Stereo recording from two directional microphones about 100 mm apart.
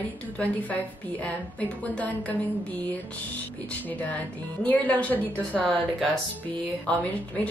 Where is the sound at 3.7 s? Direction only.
15° left (ahead or behind).